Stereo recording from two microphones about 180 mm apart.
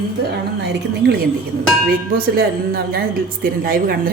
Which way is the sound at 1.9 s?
55° right (ahead or behind).